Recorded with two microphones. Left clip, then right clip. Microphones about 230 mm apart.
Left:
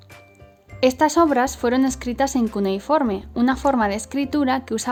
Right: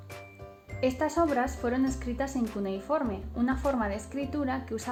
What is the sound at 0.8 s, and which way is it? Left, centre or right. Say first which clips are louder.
Speech: left 11 dB; left.